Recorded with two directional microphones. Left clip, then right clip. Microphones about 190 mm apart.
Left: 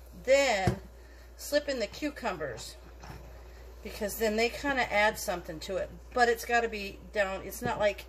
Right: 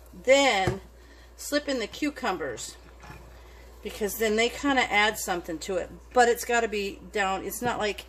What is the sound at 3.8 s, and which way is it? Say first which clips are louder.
A woman's voice: right 4 dB; 50° right (ahead or behind).